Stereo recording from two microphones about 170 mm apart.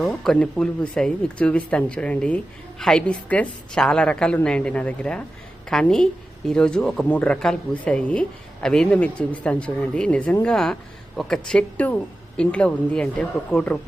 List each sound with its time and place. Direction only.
0.0 s speech: centre (ahead or behind)